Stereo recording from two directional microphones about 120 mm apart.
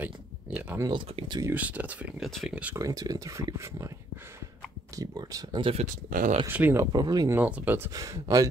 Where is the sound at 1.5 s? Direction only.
10° right (ahead or behind).